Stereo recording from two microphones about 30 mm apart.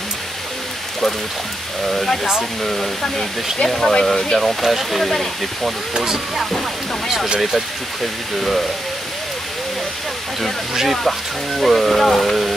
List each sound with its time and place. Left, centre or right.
1.9 s speech: centre
4.4 s speech: centre
5.9 s speech: centre
7.3 s speech: centre
8.4 s speech: centre
10.7 s speech: centre
11.1 s speech: centre